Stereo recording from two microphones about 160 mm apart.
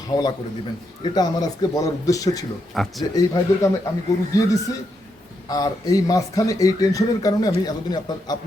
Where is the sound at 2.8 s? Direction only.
Centre (ahead or behind).